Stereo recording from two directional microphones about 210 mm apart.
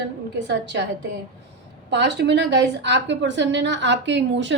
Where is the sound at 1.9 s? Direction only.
55° right (ahead or behind).